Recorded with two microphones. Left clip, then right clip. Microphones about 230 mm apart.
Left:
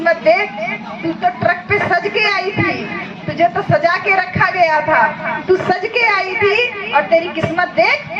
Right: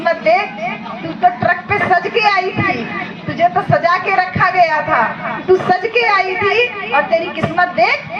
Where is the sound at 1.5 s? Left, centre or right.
Left.